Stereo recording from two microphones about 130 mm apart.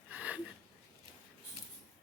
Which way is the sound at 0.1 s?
10° right (ahead or behind).